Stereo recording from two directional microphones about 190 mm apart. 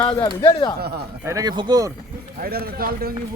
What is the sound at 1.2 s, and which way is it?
Speech, 20° right (ahead or behind).